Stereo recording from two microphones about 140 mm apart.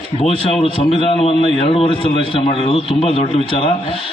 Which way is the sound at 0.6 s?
40° left (ahead or behind).